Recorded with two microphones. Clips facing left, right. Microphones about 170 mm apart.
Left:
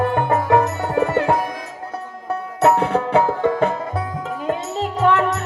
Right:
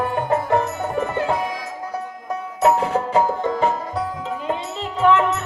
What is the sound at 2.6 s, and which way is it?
Music, 65° left (ahead or behind).